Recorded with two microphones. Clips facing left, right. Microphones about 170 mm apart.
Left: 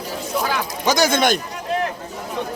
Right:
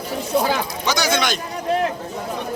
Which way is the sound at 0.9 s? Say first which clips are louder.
Left 4 dB; 50° left (ahead or behind).